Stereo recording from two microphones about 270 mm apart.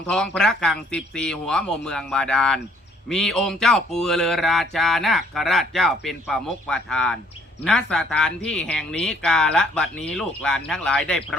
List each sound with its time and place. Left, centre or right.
0.1 s speech: centre